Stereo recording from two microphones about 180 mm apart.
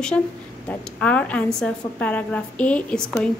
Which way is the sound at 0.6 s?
10° left (ahead or behind).